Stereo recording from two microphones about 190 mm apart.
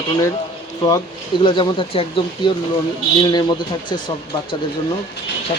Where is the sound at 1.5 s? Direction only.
25° left (ahead or behind).